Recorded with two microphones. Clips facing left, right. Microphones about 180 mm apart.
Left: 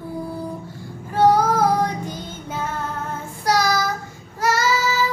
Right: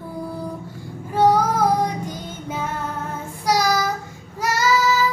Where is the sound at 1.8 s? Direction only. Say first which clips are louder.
Even; 15° right (ahead or behind).